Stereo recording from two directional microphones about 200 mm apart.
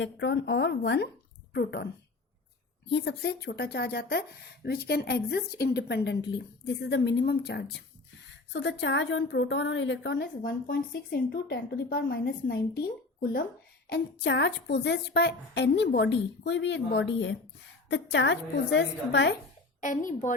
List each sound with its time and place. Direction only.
0.0 s a woman's voice: 60° left (ahead or behind)
2.9 s a woman's voice: 55° left (ahead or behind)
13.9 s a woman's voice: 60° left (ahead or behind)
19.8 s a woman's voice: 40° left (ahead or behind)